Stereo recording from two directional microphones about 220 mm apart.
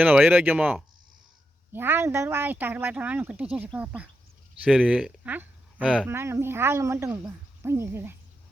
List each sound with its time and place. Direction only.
0.0 s speech: 10° right (ahead or behind)